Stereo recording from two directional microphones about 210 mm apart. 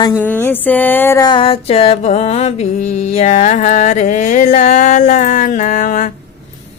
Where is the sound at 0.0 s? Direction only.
15° left (ahead or behind); by 6.1 s 35° left (ahead or behind).